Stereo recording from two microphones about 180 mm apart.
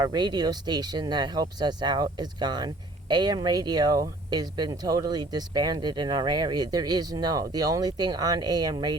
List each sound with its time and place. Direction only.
0.0 s speech: 25° right (ahead or behind)